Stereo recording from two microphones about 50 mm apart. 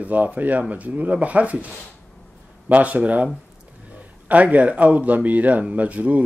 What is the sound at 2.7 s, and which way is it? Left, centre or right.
Speech, right.